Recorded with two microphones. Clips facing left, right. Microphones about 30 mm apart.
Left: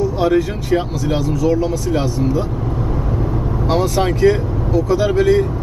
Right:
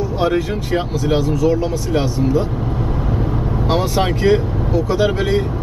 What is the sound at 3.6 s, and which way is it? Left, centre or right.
Speech, centre.